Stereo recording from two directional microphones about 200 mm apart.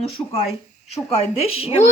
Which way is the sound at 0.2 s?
20° left (ahead or behind).